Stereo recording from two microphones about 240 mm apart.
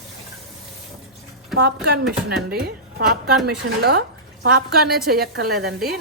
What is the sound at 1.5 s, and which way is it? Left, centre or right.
A woman's voice, right.